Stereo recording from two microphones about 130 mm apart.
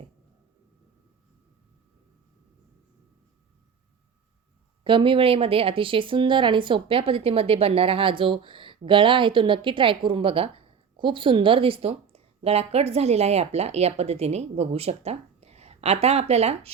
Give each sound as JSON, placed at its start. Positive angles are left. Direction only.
{"t": 4.8, "sound": "a woman's voice", "side_deg": -40}